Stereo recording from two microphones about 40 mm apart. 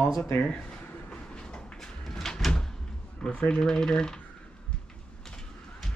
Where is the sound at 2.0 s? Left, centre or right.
Centre.